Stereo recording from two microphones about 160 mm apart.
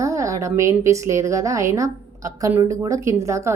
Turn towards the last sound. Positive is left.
turn(degrees=-20)  # may be behind; listen again after turning